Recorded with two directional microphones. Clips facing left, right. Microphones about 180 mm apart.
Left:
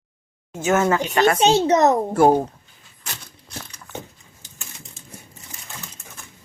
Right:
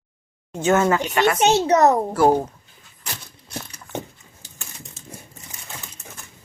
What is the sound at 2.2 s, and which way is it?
Speech, 20° left (ahead or behind).